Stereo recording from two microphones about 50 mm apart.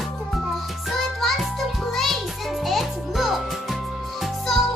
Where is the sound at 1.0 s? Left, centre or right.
Centre.